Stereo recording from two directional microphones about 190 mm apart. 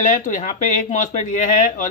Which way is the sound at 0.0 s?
40° left (ahead or behind).